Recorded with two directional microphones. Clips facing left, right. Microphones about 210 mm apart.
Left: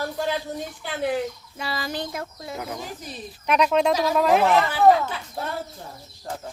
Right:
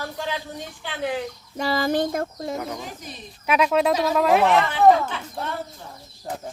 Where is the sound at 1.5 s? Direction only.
45° right (ahead or behind).